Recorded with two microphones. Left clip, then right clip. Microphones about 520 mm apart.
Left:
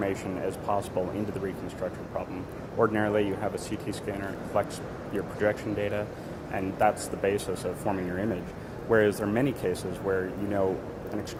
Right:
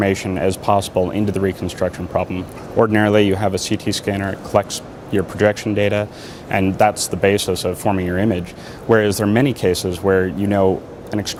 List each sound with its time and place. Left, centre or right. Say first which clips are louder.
0.0 s speech: right 12 dB; right